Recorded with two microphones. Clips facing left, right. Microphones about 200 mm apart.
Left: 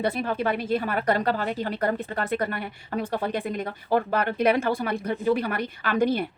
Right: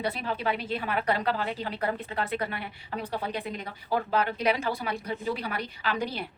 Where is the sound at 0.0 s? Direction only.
50° left (ahead or behind).